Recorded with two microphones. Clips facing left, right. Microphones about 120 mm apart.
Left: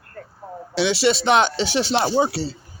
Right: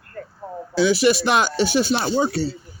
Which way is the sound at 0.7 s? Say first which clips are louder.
Right 3 dB; 80° left.